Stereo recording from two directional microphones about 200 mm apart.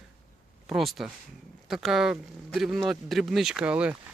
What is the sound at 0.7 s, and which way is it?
Speech, centre (ahead or behind).